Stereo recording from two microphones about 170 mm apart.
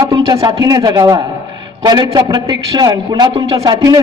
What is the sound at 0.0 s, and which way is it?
A man's voice, 25° right (ahead or behind).